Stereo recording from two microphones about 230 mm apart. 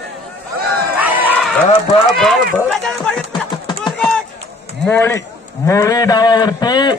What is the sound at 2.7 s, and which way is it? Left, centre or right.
Music, centre.